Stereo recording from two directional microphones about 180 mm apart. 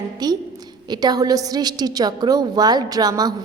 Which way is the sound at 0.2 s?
20° right (ahead or behind).